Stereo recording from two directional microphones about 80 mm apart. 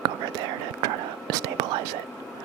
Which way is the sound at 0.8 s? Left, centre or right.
Right.